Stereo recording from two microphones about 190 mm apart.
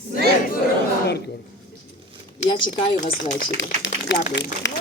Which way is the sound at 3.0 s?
45° left (ahead or behind).